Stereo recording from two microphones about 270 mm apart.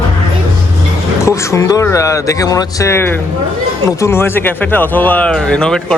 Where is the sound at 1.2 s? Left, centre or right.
Centre.